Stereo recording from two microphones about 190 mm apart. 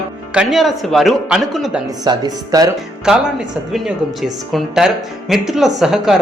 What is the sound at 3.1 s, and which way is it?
Speech, 5° right (ahead or behind).